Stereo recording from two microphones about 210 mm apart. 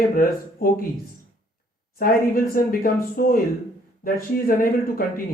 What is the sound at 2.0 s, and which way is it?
Speech, 45° left (ahead or behind).